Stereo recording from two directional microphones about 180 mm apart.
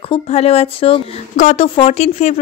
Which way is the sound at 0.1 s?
35° left (ahead or behind).